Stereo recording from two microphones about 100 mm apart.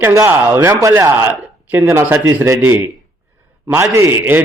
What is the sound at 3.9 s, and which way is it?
Speech, 25° right (ahead or behind).